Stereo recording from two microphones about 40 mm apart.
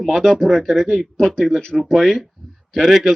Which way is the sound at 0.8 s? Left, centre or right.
Left.